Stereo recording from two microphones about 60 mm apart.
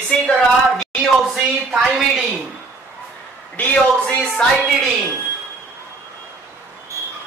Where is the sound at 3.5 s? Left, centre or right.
Centre.